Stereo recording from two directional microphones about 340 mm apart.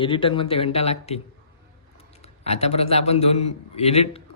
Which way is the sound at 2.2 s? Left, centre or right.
Centre.